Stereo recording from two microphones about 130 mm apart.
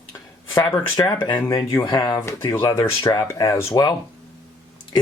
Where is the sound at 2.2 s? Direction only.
20° left (ahead or behind).